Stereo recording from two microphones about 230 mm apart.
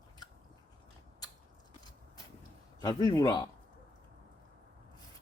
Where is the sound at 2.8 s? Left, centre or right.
Centre.